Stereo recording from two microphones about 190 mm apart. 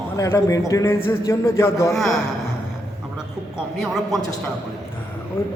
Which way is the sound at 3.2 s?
5° right (ahead or behind).